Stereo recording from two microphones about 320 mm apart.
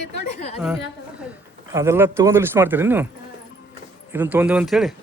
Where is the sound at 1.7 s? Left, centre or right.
Centre.